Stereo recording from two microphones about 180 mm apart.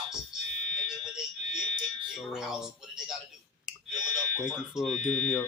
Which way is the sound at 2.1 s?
Centre (ahead or behind).